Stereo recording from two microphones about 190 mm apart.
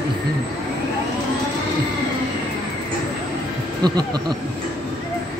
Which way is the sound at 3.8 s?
20° right (ahead or behind).